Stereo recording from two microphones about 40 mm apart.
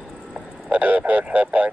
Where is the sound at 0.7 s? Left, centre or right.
Right.